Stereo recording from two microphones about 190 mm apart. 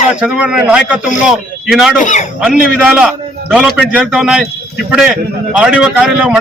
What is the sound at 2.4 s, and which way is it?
A man's voice, 5° right (ahead or behind).